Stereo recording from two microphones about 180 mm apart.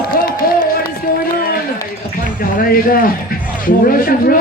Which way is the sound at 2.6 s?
55° left (ahead or behind).